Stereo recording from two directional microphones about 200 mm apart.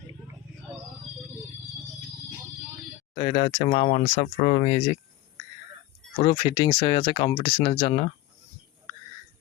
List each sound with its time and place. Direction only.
3.2 s speech: 30° left (ahead or behind)
6.1 s speech: 25° left (ahead or behind)